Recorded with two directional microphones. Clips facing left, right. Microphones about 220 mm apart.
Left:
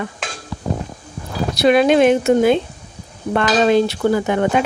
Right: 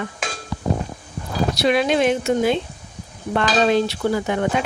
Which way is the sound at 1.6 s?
55° left (ahead or behind).